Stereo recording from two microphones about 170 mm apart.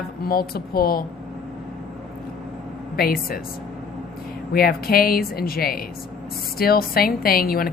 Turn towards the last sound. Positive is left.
turn(degrees=60)  # may be behind; listen again after turning